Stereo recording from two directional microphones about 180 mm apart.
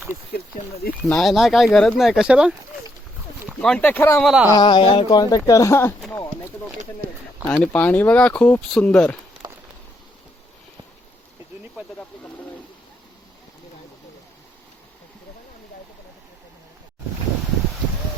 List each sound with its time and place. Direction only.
1.0 s speech: centre (ahead or behind)
3.6 s speech: 5° left (ahead or behind)
4.2 s speech: centre (ahead or behind)
4.5 s speech: 25° left (ahead or behind)
6.0 s clip-clop: 10° left (ahead or behind)
7.4 s speech: 10° left (ahead or behind)